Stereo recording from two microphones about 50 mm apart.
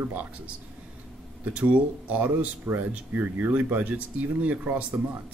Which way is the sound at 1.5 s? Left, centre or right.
Right.